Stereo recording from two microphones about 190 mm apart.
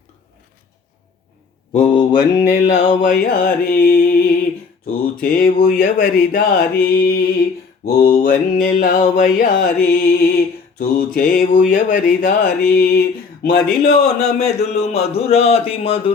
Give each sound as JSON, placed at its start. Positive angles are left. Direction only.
{"t": 1.7, "sound": "mantra", "side_deg": 30}
{"t": 2.6, "sound": "mantra", "side_deg": 45}
{"t": 13.8, "sound": "speech", "side_deg": 35}